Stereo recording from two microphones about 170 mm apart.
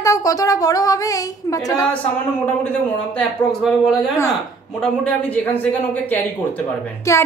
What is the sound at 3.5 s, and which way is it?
A woman's voice, centre (ahead or behind).